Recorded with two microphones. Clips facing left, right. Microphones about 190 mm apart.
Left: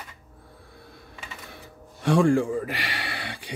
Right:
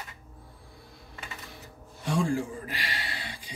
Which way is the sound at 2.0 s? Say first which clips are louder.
Left 8 dB; 70° left (ahead or behind).